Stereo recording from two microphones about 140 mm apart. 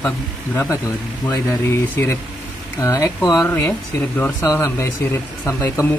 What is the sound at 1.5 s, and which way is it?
Speech, 20° left (ahead or behind).